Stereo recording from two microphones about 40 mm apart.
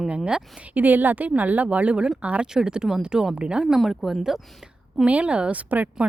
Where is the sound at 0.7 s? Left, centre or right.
Right.